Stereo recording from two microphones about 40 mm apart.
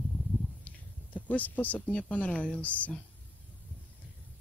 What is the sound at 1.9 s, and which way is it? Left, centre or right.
Speech, left.